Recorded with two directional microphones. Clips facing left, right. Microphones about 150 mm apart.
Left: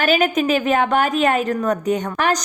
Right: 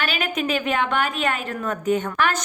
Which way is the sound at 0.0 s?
40° left (ahead or behind).